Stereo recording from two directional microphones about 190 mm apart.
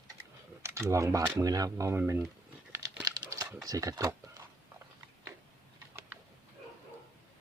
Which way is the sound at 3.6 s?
20° right (ahead or behind).